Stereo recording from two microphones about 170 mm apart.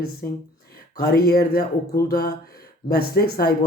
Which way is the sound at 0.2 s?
60° left (ahead or behind).